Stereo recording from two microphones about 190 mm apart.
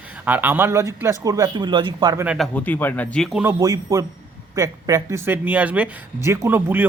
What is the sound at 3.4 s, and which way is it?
A man's voice, 15° right (ahead or behind).